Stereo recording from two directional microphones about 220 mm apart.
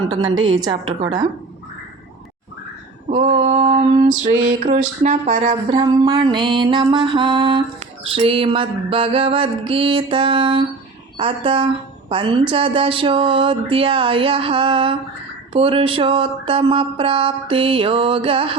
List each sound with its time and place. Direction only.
0.4 s a woman's voice: 20° right (ahead or behind)
3.4 s a woman's voice: 30° right (ahead or behind)